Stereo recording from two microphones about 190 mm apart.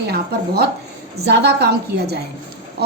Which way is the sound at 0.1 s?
55° right (ahead or behind).